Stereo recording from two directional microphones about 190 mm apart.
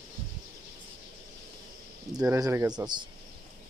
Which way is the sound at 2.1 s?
15° right (ahead or behind).